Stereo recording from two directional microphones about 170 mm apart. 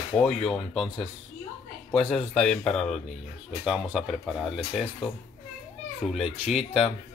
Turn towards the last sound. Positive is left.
turn(degrees=0)  # may be behind; listen again after turning